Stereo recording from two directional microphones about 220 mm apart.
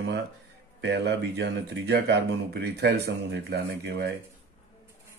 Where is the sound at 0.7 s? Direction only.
50° right (ahead or behind).